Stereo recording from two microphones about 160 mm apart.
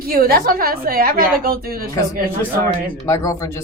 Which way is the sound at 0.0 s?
65° right (ahead or behind).